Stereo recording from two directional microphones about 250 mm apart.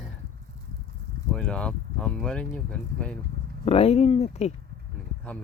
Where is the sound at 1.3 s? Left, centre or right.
Centre.